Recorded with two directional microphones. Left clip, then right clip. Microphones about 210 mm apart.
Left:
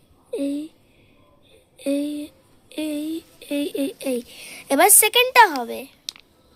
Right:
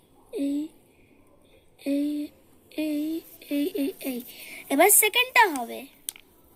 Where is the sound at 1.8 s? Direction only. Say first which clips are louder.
Left 3 dB; 55° left (ahead or behind).